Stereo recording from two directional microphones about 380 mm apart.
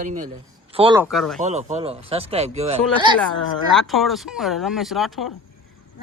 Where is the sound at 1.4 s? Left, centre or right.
Centre.